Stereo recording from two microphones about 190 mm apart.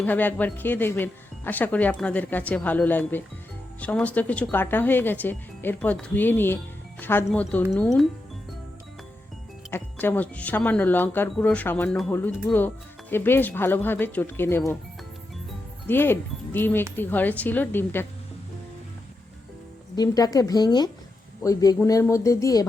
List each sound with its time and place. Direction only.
0.0 s speech: 10° left (ahead or behind)
9.6 s speech: 10° left (ahead or behind)
15.9 s speech: 10° left (ahead or behind)
20.0 s a woman's voice: 20° left (ahead or behind)